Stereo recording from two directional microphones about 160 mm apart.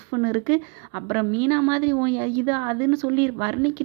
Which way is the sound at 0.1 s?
25° right (ahead or behind).